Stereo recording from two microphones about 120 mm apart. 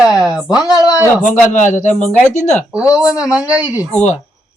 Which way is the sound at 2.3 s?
75° left (ahead or behind).